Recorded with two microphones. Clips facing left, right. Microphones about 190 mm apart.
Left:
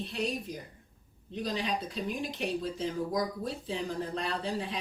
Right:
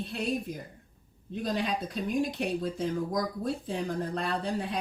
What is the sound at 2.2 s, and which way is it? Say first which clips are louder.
Speech: right 5 dB; 55° right (ahead or behind).